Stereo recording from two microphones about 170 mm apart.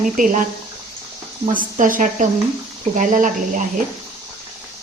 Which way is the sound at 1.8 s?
50° right (ahead or behind).